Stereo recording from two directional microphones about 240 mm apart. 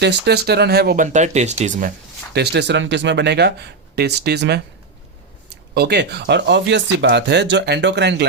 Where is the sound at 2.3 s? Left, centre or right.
Right.